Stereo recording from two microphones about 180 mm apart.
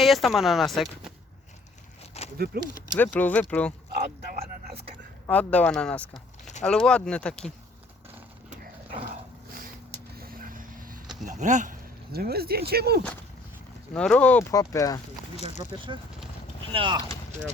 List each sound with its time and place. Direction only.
0.0 s speech: centre (ahead or behind)
2.2 s a sound: 35° left (ahead or behind)
3.0 s speech: 10° left (ahead or behind)
3.9 s speech: 60° right (ahead or behind)
5.2 s speech: 10° left (ahead or behind)
9.0 s dog: 50° right (ahead or behind)
10.2 s vehicle: 55° right (ahead or behind)
11.3 s speech: 40° right (ahead or behind); by 13.0 s 60° right (ahead or behind)
13.9 s speech: 5° left (ahead or behind)
14.5 s speech: 20° left (ahead or behind)
15.4 s speech: 40° left (ahead or behind)
15.9 s speech: 25° right (ahead or behind)